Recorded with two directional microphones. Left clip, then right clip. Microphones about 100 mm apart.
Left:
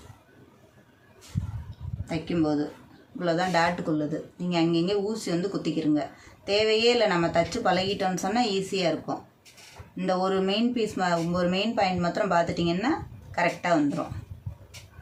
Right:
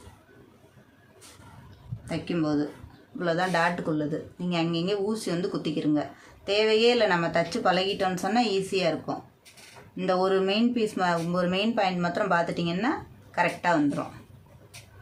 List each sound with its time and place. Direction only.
2.0 s speech: 45° right (ahead or behind)